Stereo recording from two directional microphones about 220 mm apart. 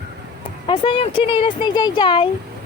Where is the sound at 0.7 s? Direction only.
25° left (ahead or behind).